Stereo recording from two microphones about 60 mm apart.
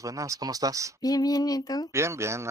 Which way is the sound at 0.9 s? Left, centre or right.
Left.